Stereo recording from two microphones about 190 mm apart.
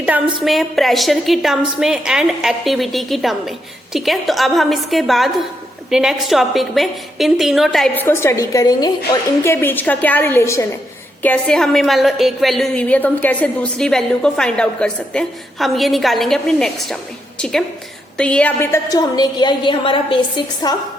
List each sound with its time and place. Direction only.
0.4 s a woman's voice: centre (ahead or behind)
8.0 s a woman's voice: 15° left (ahead or behind)
18.2 s a woman's voice: 5° left (ahead or behind); by 20.7 s 20° left (ahead or behind)